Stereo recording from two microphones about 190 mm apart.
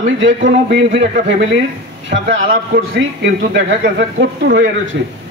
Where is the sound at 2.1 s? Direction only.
90° right.